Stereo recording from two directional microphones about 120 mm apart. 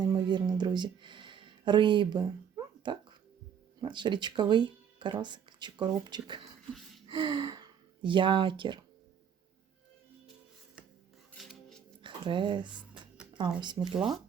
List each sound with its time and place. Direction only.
0.0 s a sound: 35° right (ahead or behind)
3.8 s speech: 40° right (ahead or behind)
11.3 s music: centre (ahead or behind)
12.0 s speech: 40° right (ahead or behind)
12.9 s music: 10° right (ahead or behind)
13.8 s speech: 15° right (ahead or behind)